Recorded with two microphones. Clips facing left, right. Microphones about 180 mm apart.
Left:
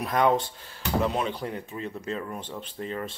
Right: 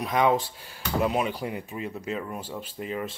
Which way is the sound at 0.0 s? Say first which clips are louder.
Even; centre (ahead or behind).